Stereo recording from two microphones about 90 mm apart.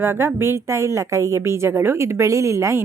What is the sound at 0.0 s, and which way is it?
A woman's voice, 30° right (ahead or behind).